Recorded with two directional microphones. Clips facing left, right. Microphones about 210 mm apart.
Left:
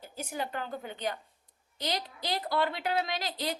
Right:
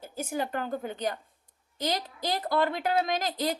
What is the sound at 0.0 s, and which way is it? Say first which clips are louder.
A woman's voice: right 5 dB; 45° right (ahead or behind).